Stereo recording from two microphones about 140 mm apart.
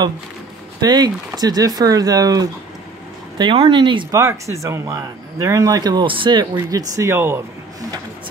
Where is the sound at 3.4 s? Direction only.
35° right (ahead or behind).